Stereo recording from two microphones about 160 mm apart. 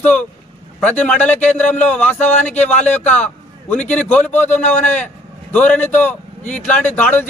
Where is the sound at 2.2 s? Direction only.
45° left (ahead or behind).